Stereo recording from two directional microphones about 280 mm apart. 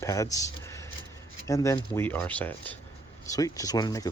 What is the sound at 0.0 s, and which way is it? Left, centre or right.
Speech, centre.